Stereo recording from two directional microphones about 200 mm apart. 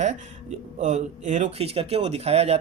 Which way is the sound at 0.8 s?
35° right (ahead or behind).